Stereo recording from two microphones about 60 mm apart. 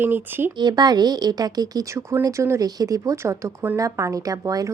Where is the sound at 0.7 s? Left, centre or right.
Right.